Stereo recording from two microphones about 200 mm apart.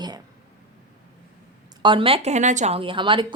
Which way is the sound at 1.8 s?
25° right (ahead or behind).